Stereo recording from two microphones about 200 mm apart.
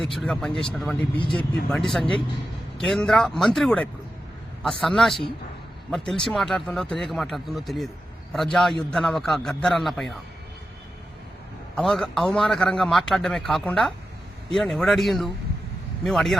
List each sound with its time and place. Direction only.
0.0 s a man's voice: centre (ahead or behind)
11.7 s a man's voice: centre (ahead or behind)